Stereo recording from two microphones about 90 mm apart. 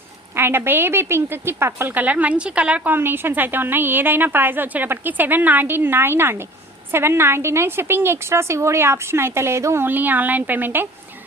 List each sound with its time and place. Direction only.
0.3 s a woman's voice: 25° right (ahead or behind)